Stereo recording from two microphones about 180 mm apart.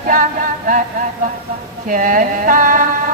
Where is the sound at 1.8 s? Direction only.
50° right (ahead or behind).